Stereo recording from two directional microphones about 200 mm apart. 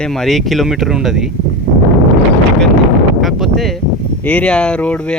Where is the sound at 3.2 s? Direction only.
Centre (ahead or behind).